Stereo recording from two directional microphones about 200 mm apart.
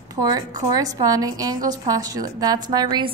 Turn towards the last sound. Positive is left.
turn(degrees=-20)  # may be behind; listen again after turning